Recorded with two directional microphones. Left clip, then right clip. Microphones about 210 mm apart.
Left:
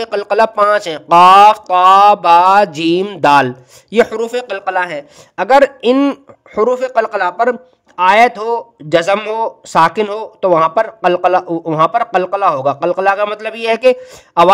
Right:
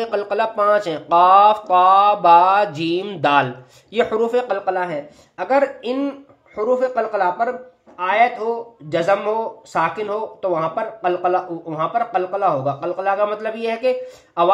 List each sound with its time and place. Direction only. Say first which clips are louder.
0.0 s speech: left 7 dB; 45° left (ahead or behind)